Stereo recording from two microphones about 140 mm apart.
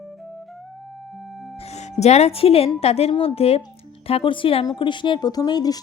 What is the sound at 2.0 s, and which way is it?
A woman's voice, 50° left (ahead or behind).